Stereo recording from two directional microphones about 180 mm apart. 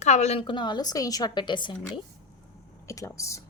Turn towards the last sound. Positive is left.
turn(degrees=15)  # may be behind; listen again after turning